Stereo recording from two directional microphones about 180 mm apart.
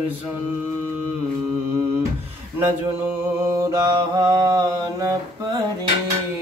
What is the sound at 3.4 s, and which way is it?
Mantra, 15° right (ahead or behind).